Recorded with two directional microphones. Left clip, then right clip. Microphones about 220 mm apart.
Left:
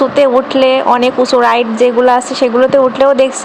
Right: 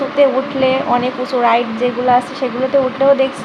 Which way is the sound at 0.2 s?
40° left (ahead or behind).